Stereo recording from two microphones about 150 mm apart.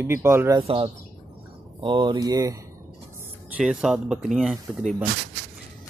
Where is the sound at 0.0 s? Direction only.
15° right (ahead or behind).